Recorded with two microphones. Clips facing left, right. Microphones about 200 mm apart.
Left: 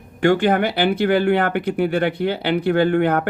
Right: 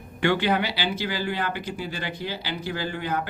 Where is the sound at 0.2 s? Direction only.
45° left (ahead or behind).